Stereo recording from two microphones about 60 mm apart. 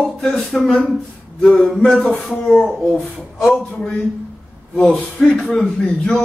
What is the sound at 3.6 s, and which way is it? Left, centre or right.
A man's voice, centre.